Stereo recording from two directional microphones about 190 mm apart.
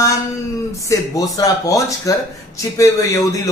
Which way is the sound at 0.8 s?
15° left (ahead or behind).